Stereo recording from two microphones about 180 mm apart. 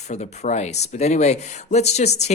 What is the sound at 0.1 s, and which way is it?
Speech, 40° left (ahead or behind).